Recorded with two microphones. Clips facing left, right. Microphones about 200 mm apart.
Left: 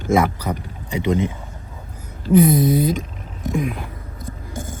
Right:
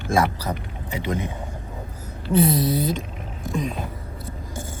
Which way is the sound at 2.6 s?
50° left (ahead or behind).